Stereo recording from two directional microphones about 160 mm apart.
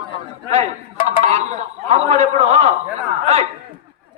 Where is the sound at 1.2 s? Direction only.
45° right (ahead or behind).